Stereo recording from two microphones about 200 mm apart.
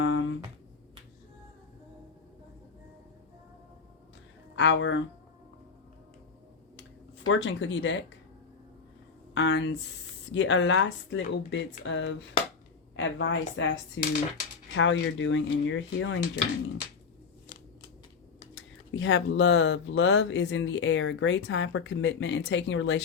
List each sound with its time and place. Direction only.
0.0 s a sound: 70° left (ahead or behind)
4.5 s speech: 65° left (ahead or behind)
7.3 s speech: 65° left (ahead or behind)
9.3 s speech: 60° left (ahead or behind)
18.5 s speech: 70° left (ahead or behind)